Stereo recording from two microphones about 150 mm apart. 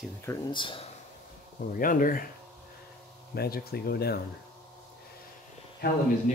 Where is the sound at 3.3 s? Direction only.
90° left.